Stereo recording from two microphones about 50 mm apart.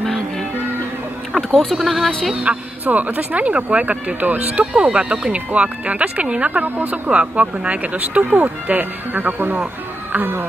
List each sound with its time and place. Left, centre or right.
1.6 s speech: centre
2.4 s speech: right
7.1 s speech: right